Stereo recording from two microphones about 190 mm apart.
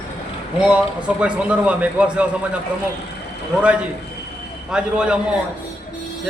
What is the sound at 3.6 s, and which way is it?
A man's voice, 5° right (ahead or behind).